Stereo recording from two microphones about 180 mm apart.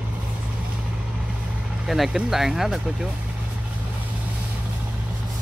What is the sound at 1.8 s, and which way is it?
Speech, centre (ahead or behind).